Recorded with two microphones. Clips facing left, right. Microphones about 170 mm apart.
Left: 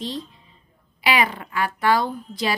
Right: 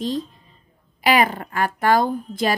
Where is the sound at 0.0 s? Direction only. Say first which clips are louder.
Right 6 dB; 45° right (ahead or behind).